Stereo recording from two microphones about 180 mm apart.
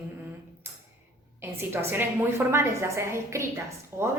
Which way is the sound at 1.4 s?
15° right (ahead or behind).